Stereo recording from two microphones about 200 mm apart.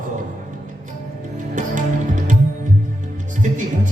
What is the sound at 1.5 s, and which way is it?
Music, 40° right (ahead or behind).